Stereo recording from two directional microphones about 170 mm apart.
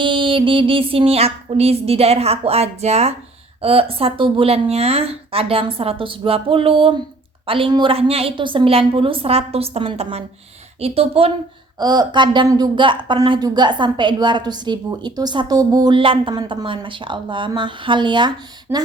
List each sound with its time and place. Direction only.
0.0 s speech: 30° right (ahead or behind)
11.8 s speech: 25° right (ahead or behind)